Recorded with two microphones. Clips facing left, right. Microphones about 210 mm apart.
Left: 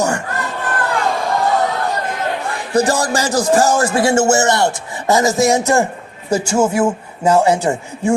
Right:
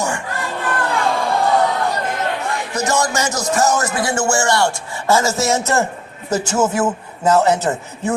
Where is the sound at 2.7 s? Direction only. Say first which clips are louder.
Left 5 dB; 30° left (ahead or behind).